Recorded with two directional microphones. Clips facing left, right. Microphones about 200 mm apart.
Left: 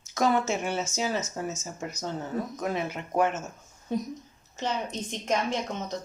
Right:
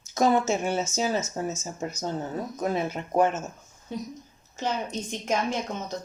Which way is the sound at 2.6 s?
35° right (ahead or behind).